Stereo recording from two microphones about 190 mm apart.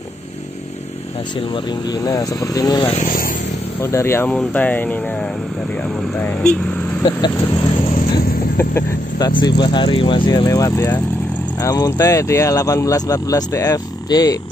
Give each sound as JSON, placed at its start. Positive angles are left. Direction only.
{"t": 1.5, "sound": "speech", "side_deg": 20}
{"t": 3.0, "sound": "speech", "side_deg": 45}
{"t": 3.8, "sound": "speech", "side_deg": 15}
{"t": 6.2, "sound": "speech", "side_deg": 5}
{"t": 8.5, "sound": "vehicle", "side_deg": 15}
{"t": 9.3, "sound": "speech", "side_deg": 25}